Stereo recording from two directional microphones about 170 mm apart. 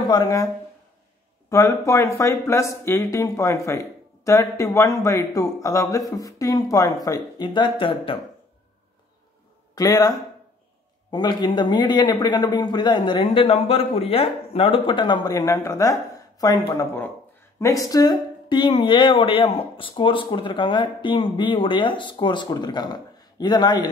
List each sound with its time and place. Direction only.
0.1 s speech: 20° left (ahead or behind)
1.5 s speech: 20° left (ahead or behind)
9.8 s speech: 20° left (ahead or behind)